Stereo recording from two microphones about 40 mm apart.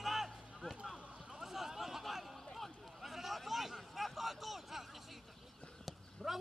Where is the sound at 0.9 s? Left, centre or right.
Right.